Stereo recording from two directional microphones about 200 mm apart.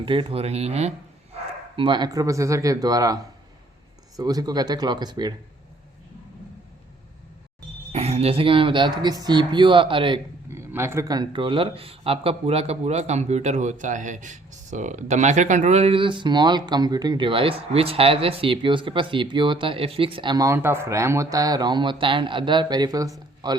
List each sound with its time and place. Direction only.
0.0 s speech: 25° right (ahead or behind)
4.2 s speech: 20° right (ahead or behind)
7.9 s speech: 30° right (ahead or behind)
10.5 s speech: 15° right (ahead or behind)